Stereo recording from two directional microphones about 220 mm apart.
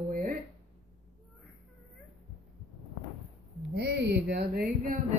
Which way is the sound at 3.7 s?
50° right (ahead or behind).